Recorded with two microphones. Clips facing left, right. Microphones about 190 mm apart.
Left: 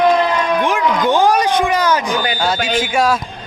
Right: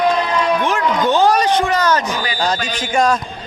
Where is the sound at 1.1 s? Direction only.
10° left (ahead or behind).